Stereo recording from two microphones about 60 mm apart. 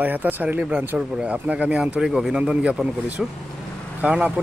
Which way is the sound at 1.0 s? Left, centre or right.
Centre.